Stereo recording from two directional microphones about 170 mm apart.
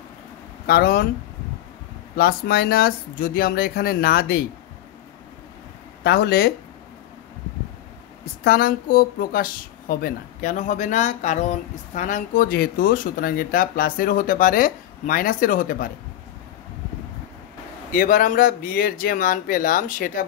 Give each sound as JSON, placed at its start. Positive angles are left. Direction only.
{"t": 0.7, "sound": "speech", "side_deg": 65}
{"t": 2.1, "sound": "speech", "side_deg": 65}
{"t": 6.0, "sound": "speech", "side_deg": 70}
{"t": 8.5, "sound": "speech", "side_deg": 60}
{"t": 17.9, "sound": "speech", "side_deg": 50}